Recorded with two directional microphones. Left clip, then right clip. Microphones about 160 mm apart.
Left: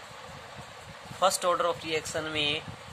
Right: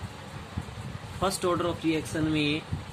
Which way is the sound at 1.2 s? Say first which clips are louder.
Left 2 dB; 40° left (ahead or behind).